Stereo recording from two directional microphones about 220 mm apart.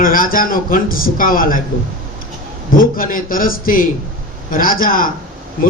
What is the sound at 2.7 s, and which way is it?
A man's voice, 40° left (ahead or behind).